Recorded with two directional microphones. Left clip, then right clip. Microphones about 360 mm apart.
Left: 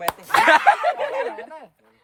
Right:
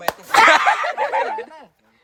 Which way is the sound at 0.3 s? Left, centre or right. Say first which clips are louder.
Right 2 dB; centre.